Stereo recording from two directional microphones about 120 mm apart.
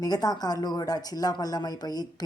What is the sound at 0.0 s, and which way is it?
A woman's voice, 30° left (ahead or behind).